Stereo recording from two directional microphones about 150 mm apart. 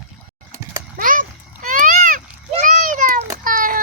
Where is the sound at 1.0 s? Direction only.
65° right (ahead or behind).